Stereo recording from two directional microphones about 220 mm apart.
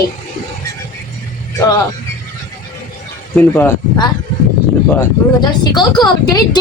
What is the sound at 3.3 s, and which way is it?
Speech, 10° left (ahead or behind).